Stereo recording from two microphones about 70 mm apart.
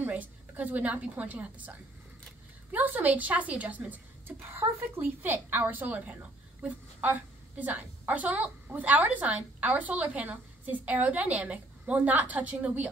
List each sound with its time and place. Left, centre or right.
0.1 s a woman's voice: right
4.4 s a woman's voice: right